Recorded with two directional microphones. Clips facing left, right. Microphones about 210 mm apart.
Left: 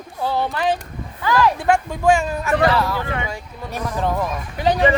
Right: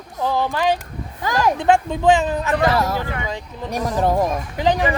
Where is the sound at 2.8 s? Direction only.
40° right (ahead or behind).